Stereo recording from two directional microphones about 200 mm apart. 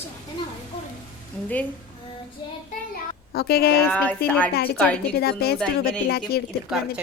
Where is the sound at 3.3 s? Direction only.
50° left (ahead or behind).